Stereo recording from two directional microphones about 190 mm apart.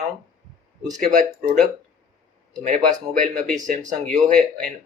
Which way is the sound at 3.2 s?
40° right (ahead or behind).